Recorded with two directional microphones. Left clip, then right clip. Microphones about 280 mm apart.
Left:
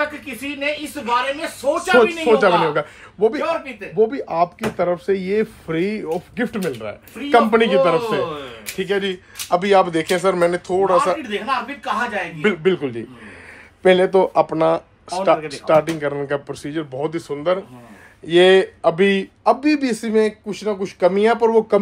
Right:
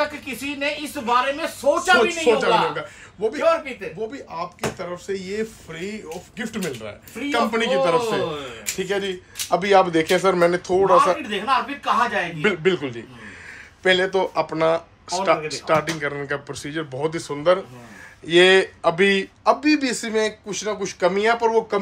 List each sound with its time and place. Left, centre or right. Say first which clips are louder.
0.6 s speech: left 3 dB; centre